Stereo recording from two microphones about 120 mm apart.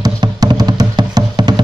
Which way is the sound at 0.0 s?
35° right (ahead or behind).